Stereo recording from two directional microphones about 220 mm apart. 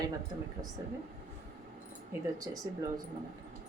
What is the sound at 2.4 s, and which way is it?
Speech, 15° right (ahead or behind).